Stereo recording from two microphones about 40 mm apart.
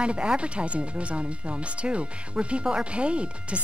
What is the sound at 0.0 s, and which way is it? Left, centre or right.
Speech, right.